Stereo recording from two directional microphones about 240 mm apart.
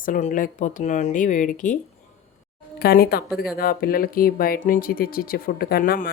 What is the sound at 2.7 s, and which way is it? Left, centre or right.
Speech, left.